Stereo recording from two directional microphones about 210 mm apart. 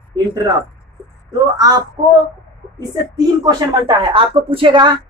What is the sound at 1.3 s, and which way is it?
A woman's voice, 15° right (ahead or behind).